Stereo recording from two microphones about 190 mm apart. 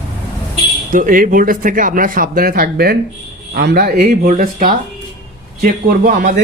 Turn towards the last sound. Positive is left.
turn(degrees=-50)  # may be behind; listen again after turning